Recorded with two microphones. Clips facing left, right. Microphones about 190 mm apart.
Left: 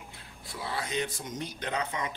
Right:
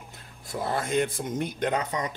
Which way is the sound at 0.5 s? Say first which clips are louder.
Right 7 dB; 50° right (ahead or behind).